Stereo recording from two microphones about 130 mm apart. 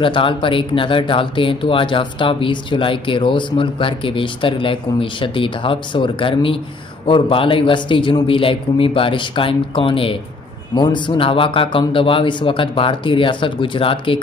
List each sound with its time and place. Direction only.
0.0 s speech: 40° left (ahead or behind)